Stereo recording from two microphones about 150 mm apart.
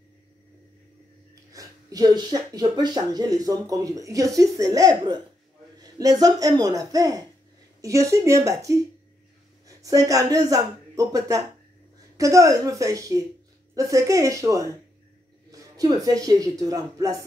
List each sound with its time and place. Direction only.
1.5 s speech: 25° right (ahead or behind)